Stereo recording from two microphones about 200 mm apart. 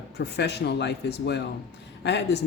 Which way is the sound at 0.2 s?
55° left (ahead or behind).